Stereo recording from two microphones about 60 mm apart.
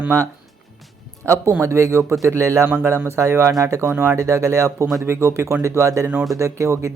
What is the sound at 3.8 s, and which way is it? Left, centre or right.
Speech, right.